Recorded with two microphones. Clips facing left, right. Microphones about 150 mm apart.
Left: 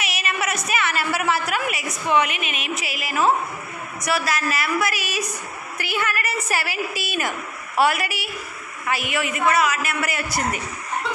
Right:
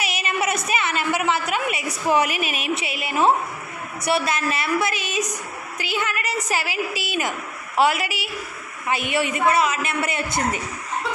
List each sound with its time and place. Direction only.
0.0 s a woman's voice: 30° right (ahead or behind)
8.8 s a woman's voice: 25° right (ahead or behind)